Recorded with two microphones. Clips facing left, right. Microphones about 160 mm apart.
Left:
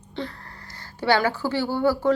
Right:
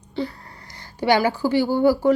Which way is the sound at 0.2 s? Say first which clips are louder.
Right 5 dB; 5° right (ahead or behind).